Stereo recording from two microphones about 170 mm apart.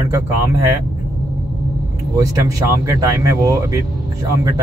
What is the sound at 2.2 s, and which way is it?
Speech, 20° right (ahead or behind).